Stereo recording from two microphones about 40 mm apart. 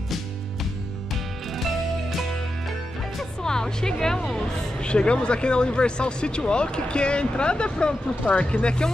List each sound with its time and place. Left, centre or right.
3.4 s a woman's voice: centre